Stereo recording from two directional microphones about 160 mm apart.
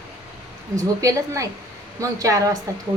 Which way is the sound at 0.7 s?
20° right (ahead or behind).